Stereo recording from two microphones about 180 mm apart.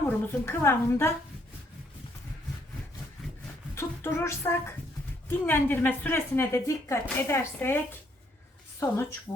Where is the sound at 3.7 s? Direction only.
10° left (ahead or behind).